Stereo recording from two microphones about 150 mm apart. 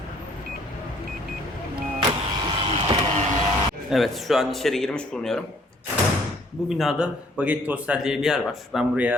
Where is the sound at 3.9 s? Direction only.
Centre (ahead or behind).